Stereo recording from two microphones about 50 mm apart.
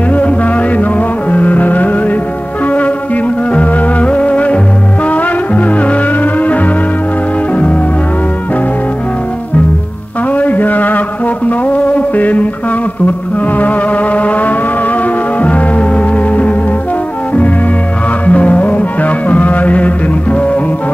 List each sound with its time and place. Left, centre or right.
0.1 s music: left
3.5 s music: left
10.3 s a sound: left
11.4 s music: left
13.6 s music: left
18.2 s music: left